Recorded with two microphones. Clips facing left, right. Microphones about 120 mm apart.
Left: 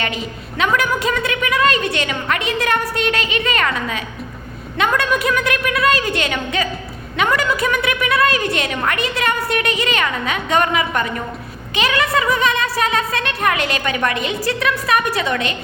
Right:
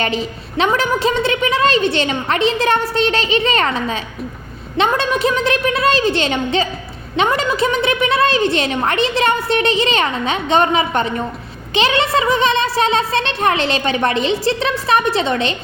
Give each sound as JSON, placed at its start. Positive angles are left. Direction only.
{"t": 0.0, "sound": "a woman's voice", "side_deg": -30}